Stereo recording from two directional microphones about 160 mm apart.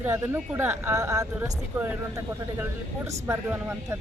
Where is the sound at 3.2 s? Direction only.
15° right (ahead or behind).